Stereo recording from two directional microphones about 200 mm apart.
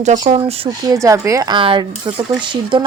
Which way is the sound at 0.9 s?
15° right (ahead or behind).